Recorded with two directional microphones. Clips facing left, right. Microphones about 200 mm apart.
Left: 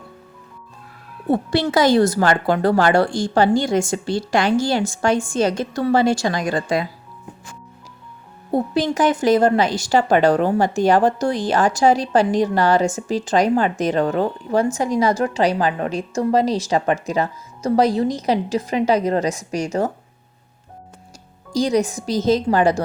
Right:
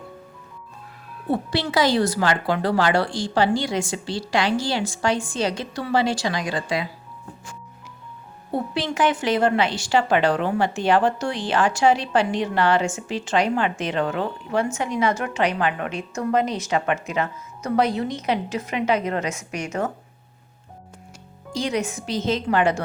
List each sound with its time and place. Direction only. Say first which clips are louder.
1.3 s a woman's voice: left 5 dB; 45° left (ahead or behind)
8.5 s a woman's voice: left 5 dB; 45° left (ahead or behind)
21.5 s a woman's voice: left 6 dB; 40° left (ahead or behind)